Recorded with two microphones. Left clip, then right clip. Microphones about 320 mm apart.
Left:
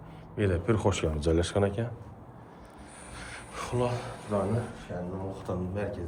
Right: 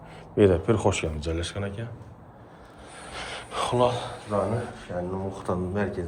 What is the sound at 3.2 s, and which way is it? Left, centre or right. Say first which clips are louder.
Gasp: right 9 dB; centre.